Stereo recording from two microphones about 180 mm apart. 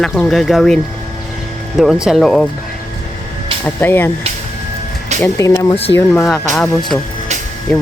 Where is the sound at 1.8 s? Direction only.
5° right (ahead or behind).